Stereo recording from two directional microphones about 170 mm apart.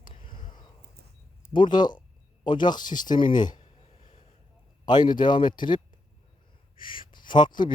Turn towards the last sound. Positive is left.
turn(degrees=25)  # may be behind; listen again after turning